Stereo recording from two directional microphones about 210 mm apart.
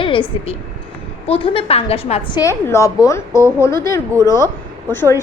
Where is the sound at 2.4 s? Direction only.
15° left (ahead or behind).